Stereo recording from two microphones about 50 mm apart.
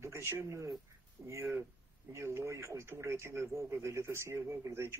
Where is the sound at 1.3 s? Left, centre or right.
Right.